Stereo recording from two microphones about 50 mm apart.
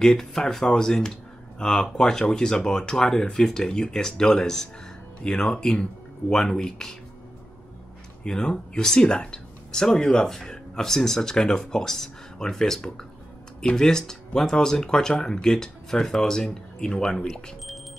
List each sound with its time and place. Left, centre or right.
0.0 s speech: centre
8.2 s speech: centre